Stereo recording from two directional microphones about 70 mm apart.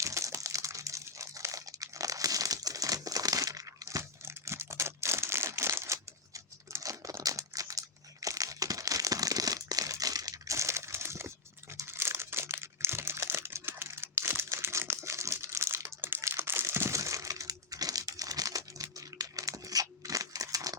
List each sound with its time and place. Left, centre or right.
0.0 s crumpling: right
16.0 s crumpling: right